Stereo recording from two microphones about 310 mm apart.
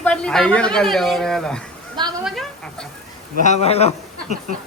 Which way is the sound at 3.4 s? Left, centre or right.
Left.